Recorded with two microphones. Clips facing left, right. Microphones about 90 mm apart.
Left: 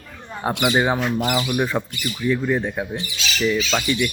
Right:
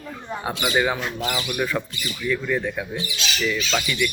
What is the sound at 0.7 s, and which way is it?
Speech, 30° left (ahead or behind).